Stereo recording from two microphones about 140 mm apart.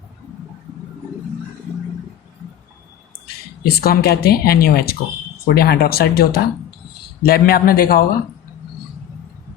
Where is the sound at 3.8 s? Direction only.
90° left.